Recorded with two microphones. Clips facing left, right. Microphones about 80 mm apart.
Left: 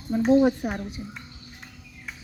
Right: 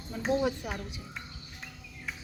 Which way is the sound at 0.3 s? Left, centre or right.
Left.